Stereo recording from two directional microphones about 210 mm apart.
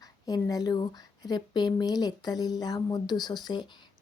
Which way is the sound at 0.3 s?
15° left (ahead or behind).